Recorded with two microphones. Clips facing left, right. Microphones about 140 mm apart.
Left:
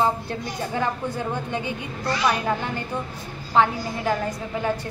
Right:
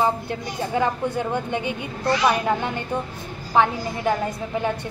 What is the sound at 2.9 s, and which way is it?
A woman's voice, 15° right (ahead or behind).